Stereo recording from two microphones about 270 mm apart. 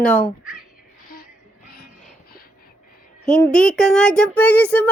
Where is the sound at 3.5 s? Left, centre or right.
Centre.